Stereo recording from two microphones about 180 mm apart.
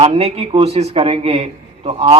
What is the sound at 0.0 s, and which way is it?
Speech, 35° right (ahead or behind).